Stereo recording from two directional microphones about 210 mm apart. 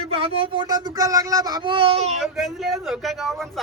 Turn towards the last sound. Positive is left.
turn(degrees=0)  # may be behind; listen again after turning